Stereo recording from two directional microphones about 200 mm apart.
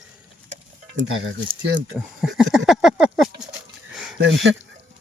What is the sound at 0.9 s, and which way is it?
Speech, 80° right.